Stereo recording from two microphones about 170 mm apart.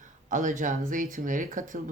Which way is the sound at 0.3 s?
50° right (ahead or behind).